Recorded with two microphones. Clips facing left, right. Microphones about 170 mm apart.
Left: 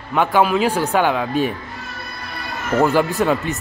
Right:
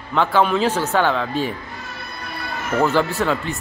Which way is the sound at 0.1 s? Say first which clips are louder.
Left 1 dB; 15° left (ahead or behind).